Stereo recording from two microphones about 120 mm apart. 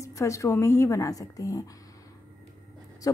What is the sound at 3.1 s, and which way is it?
Speech, 30° left (ahead or behind).